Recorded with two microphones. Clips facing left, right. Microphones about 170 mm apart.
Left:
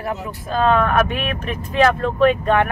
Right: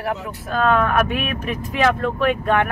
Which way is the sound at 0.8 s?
5° right (ahead or behind).